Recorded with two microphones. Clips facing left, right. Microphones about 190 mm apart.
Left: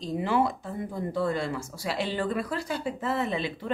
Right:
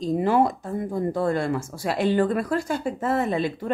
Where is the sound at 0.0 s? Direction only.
45° right (ahead or behind).